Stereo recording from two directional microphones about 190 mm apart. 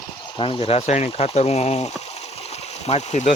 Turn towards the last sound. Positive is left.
turn(degrees=35)  # may be behind; listen again after turning